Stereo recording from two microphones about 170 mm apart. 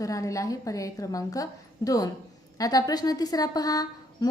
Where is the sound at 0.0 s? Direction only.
20° left (ahead or behind).